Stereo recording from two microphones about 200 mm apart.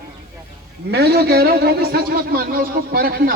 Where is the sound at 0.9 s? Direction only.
55° right (ahead or behind).